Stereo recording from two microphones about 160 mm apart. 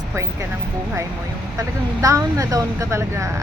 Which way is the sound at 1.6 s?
20° right (ahead or behind).